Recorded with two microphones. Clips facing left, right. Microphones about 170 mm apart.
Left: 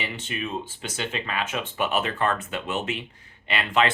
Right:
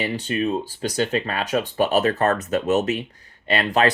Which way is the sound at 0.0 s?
35° right (ahead or behind).